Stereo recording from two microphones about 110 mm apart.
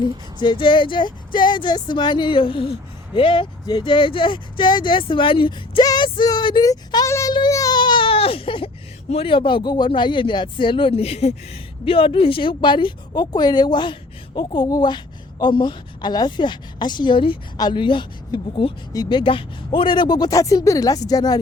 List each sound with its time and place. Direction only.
0.3 s speech: 45° left (ahead or behind)
6.7 s speech: 30° left (ahead or behind)
7.3 s baby cry: 35° left (ahead or behind); by 8.7 s 55° left (ahead or behind)
9.0 s speech: 60° left (ahead or behind); by 21.3 s 35° left (ahead or behind)